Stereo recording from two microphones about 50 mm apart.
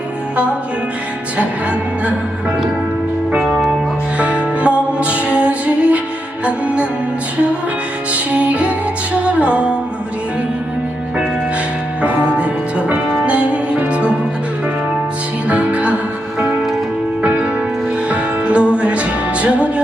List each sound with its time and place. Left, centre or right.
4.6 s music: right
8.1 s music: right
12.9 s music: right
15.4 s music: right
18.1 s music: right